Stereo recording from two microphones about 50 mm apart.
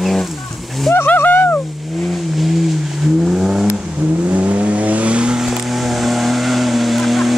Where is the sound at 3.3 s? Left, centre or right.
Centre.